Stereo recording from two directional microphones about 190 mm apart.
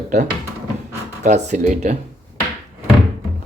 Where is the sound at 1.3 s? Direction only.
40° right (ahead or behind).